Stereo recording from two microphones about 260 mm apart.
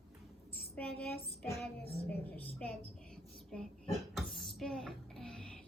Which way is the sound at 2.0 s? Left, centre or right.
Centre.